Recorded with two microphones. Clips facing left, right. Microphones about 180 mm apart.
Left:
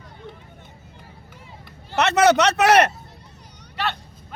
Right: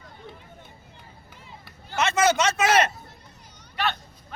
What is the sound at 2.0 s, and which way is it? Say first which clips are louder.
Speech: left 5 dB; 65° left (ahead or behind).